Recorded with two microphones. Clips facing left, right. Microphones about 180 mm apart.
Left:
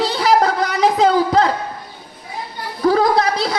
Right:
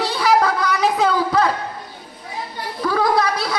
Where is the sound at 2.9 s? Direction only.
25° left (ahead or behind).